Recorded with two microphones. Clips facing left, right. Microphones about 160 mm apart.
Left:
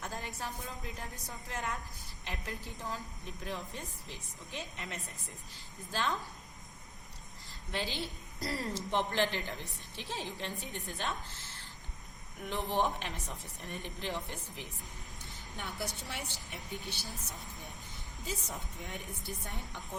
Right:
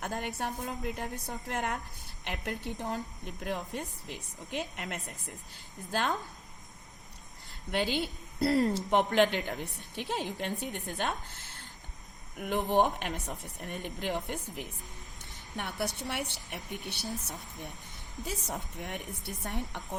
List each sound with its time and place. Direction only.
0.0 s a woman's voice: 70° right (ahead or behind)
7.7 s a woman's voice: 60° right (ahead or behind)
15.5 s a woman's voice: 65° right (ahead or behind)